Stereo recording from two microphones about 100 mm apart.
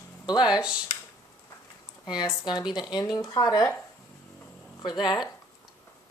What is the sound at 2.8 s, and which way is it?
Speech, 45° left (ahead or behind).